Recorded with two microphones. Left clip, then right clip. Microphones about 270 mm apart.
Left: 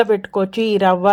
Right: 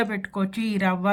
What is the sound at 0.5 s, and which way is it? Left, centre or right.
Speech, centre.